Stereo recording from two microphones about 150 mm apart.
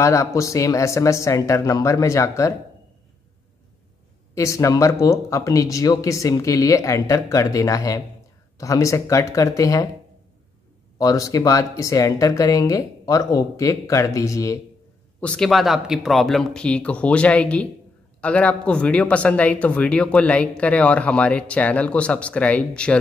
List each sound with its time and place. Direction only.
0.0 s speech: 20° left (ahead or behind)
4.4 s speech: 20° left (ahead or behind)
11.0 s speech: 20° left (ahead or behind)
15.1 s speech: 5° left (ahead or behind)